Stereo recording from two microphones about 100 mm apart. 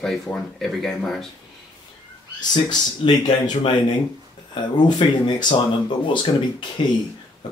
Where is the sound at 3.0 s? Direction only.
55° left (ahead or behind).